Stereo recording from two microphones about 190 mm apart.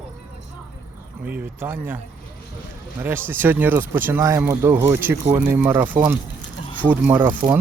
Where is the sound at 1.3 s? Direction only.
10° right (ahead or behind).